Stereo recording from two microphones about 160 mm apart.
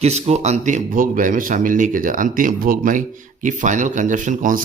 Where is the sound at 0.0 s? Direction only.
45° right (ahead or behind).